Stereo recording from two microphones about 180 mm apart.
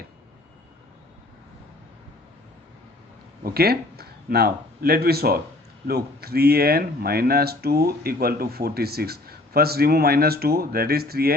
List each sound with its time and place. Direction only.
3.4 s speech: 60° right (ahead or behind)